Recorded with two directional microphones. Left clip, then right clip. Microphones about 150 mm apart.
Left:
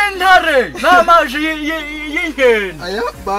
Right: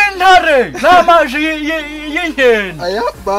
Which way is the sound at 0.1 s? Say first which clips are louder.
Right 2 dB; 20° right (ahead or behind).